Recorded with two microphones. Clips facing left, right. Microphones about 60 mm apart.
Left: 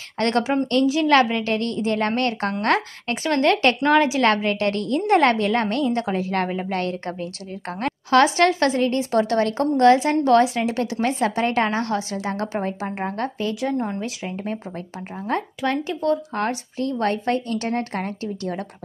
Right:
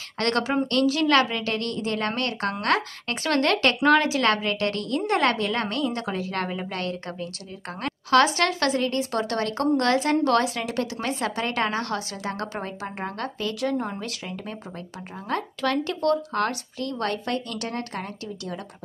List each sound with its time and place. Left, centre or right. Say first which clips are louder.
0.2 s a woman's voice: left 3 dB; left
13.8 s speech: left 4 dB; centre
14.2 s a woman's voice: left 6 dB; left